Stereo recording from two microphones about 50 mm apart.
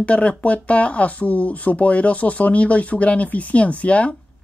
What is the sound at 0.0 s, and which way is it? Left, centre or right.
Speech, left.